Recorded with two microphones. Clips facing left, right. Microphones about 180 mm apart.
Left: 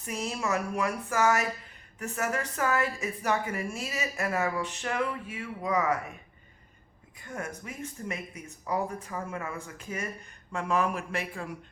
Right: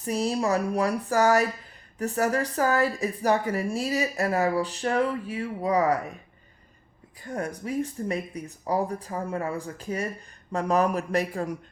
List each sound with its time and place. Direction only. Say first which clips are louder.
0.0 s speech: right 7 dB; 35° right (ahead or behind)
7.2 s speech: right 6 dB; 35° right (ahead or behind)